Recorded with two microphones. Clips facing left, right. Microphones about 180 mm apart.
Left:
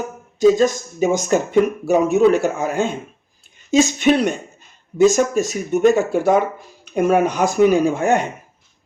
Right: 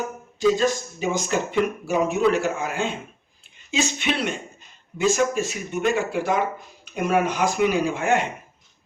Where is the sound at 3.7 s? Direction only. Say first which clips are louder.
Left 10 dB; 45° left (ahead or behind).